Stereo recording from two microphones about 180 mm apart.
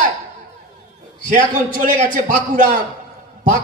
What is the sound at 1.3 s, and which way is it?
Speech, 45° right (ahead or behind).